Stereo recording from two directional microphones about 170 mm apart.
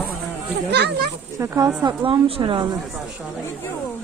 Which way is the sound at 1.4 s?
15° right (ahead or behind).